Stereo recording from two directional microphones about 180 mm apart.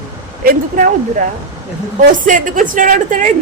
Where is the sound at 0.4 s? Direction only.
50° right (ahead or behind).